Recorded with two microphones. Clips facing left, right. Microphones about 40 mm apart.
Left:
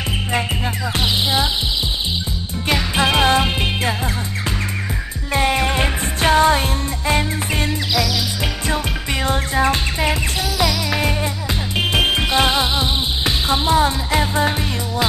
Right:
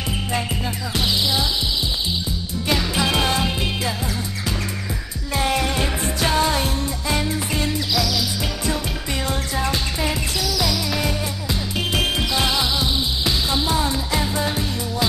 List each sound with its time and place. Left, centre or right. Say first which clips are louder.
3.0 s music: left 8 dB; left
5.3 s music: left 3 dB; left
11.7 s music: left 5 dB; left